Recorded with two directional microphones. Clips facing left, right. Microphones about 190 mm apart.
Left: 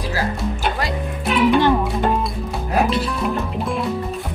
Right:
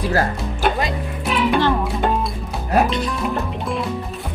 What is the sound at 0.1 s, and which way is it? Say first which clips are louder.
Music: right 2 dB; 50° right (ahead or behind).